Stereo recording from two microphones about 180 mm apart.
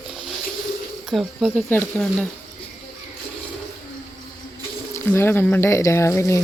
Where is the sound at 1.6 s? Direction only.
10° left (ahead or behind).